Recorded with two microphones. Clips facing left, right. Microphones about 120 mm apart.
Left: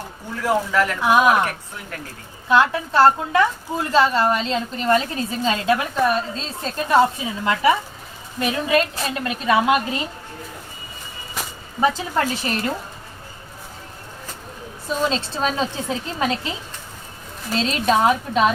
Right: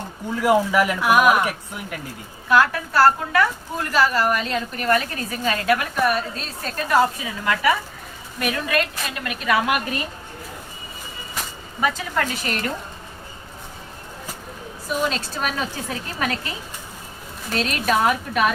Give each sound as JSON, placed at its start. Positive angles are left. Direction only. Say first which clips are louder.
{"t": 0.3, "sound": "speech", "louder": "right 2 dB", "side_deg": -10}
{"t": 1.0, "sound": "a woman's voice", "louder": "left 1 dB", "side_deg": 25}
{"t": 1.3, "sound": "speech", "louder": "even", "side_deg": -10}
{"t": 2.5, "sound": "a woman's voice", "louder": "left 1 dB", "side_deg": 20}
{"t": 11.4, "sound": "a sound", "louder": "left 1 dB", "side_deg": 0}
{"t": 11.8, "sound": "a woman's voice", "louder": "left 3 dB", "side_deg": 30}
{"t": 14.8, "sound": "a woman's voice", "louder": "left 2 dB", "side_deg": 25}
{"t": 17.5, "sound": "a woman's voice", "louder": "left 2 dB", "side_deg": 25}